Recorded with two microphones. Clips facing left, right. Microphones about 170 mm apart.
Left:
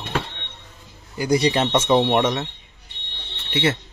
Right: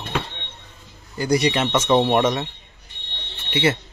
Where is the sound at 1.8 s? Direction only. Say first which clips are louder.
Right 2 dB; centre (ahead or behind).